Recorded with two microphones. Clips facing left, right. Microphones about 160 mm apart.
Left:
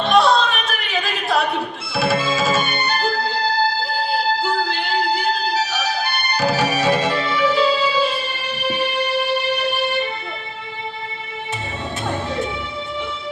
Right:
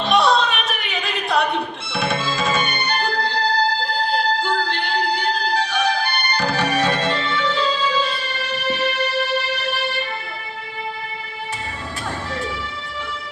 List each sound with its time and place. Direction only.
0.0 s music: centre (ahead or behind)
12.0 s music: 20° left (ahead or behind)